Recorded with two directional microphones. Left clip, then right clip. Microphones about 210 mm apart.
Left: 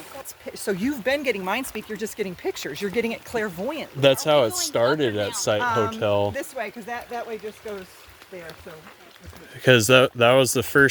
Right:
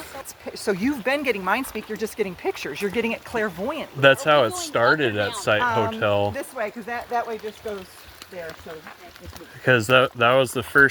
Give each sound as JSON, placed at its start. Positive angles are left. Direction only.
{"t": 0.5, "sound": "speech", "side_deg": 20}
{"t": 9.6, "sound": "speech", "side_deg": 45}